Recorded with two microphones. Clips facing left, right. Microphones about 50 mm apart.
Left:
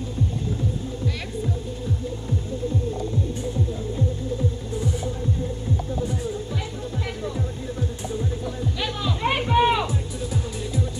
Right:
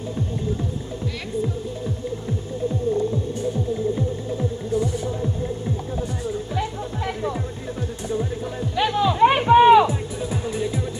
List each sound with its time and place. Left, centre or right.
8.2 s music: right